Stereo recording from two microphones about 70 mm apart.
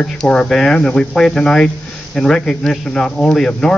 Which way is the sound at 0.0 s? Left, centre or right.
Centre.